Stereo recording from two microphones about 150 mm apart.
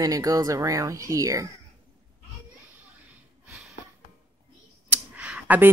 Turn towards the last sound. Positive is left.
turn(degrees=-10)  # may be behind; listen again after turning